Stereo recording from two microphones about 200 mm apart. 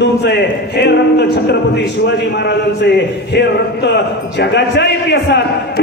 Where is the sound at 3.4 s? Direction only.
60° left (ahead or behind).